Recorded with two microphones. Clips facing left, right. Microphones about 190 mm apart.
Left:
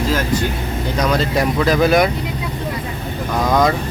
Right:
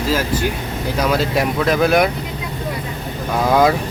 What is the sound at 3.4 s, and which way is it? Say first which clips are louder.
Speech: right 2 dB; 5° right (ahead or behind).